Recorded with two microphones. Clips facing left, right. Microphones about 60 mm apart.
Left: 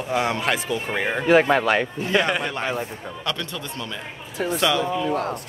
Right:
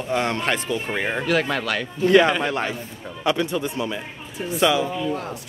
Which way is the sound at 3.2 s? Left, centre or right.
Centre.